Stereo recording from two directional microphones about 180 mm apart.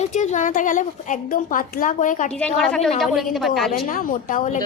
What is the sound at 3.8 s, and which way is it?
Speech, 50° left (ahead or behind).